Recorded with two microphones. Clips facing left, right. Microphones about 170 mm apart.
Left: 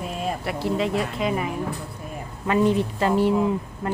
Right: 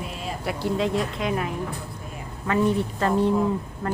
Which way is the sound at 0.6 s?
Centre (ahead or behind).